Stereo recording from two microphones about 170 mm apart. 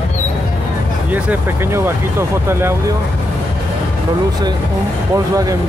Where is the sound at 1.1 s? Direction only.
10° right (ahead or behind).